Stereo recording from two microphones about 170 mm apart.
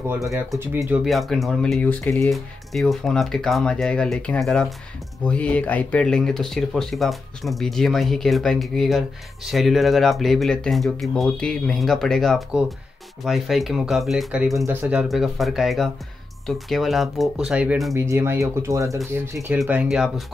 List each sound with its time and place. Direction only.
0.6 s speech: 15° right (ahead or behind)
1.0 s speech: centre (ahead or behind); by 2.3 s 15° left (ahead or behind)
2.3 s speech: centre (ahead or behind)
17.9 s speech: 15° right (ahead or behind)
19.3 s speech: 5° right (ahead or behind)